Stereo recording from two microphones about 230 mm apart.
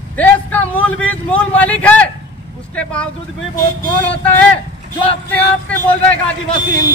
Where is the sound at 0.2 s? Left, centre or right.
Centre.